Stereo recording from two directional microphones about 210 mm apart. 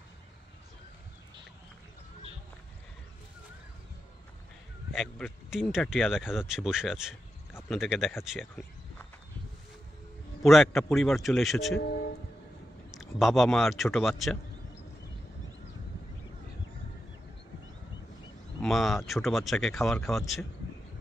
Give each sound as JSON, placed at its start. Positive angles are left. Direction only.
{"t": 4.9, "sound": "speech", "side_deg": 0}
{"t": 10.4, "sound": "speech", "side_deg": 0}
{"t": 11.8, "sound": "music", "side_deg": 50}
{"t": 12.9, "sound": "speech", "side_deg": 0}
{"t": 18.6, "sound": "speech", "side_deg": 0}